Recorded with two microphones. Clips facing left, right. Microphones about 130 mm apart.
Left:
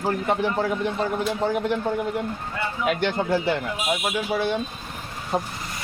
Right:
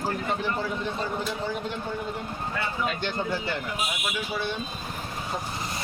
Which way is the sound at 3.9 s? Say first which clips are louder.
Left 7 dB; 60° left (ahead or behind).